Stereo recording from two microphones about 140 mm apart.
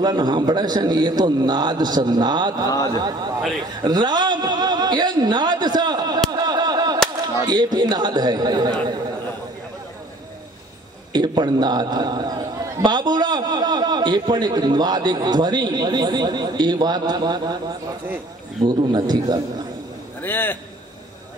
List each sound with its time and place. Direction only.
0.0 s a man's voice: 30° right (ahead or behind)
6.3 s a sound: 30° right (ahead or behind)
7.4 s a man's voice: 30° right (ahead or behind)
11.1 s a man's voice: 30° right (ahead or behind)
18.7 s a man's voice: 30° right (ahead or behind)
20.2 s a man's voice: 15° left (ahead or behind)